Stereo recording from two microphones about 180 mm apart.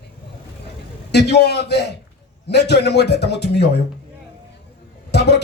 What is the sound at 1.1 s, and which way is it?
A man's voice, 70° left (ahead or behind).